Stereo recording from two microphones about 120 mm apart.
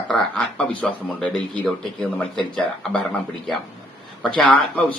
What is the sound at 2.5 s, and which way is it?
Speech, 5° left (ahead or behind).